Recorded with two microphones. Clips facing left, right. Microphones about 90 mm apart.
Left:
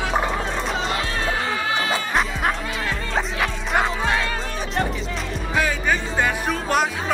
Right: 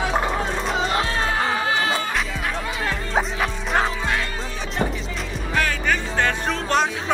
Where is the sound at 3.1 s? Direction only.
Centre (ahead or behind).